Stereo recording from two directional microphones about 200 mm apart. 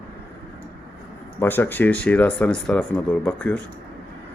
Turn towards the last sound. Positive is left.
turn(degrees=5)  # may be behind; listen again after turning